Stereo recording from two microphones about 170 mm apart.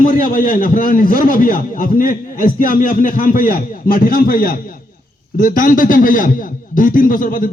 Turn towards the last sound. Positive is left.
turn(degrees=55)  # may be behind; listen again after turning